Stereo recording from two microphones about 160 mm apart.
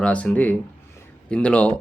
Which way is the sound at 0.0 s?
10° left (ahead or behind).